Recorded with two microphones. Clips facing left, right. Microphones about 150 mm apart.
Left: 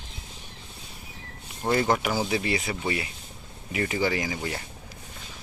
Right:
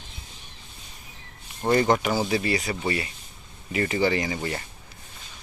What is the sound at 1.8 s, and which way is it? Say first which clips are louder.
Speech: right 2 dB; 5° left (ahead or behind).